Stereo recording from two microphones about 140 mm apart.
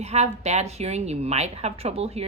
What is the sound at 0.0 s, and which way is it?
A woman's voice, 50° right (ahead or behind).